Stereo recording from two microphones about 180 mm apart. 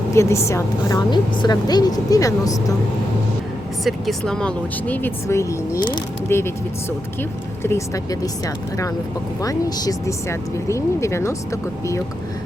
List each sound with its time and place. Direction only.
0.1 s a woman's voice: 15° left (ahead or behind)
3.8 s speech: centre (ahead or behind); by 8.3 s 20° left (ahead or behind)
9.4 s speech: 20° left (ahead or behind)